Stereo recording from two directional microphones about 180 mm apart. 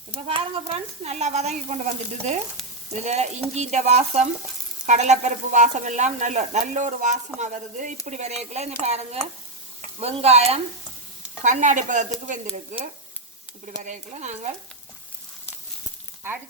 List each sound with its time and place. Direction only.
0.3 s speech: 30° right (ahead or behind)
2.9 s speech: 40° right (ahead or behind)
13.8 s speech: 40° right (ahead or behind)